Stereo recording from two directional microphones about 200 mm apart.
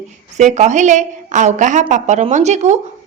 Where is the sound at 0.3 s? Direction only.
35° right (ahead or behind).